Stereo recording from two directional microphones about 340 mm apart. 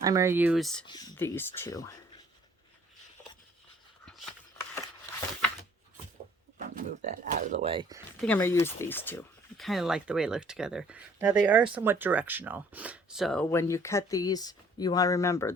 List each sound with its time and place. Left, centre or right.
0.0 s speech: centre
6.6 s speech: right
8.2 s speech: centre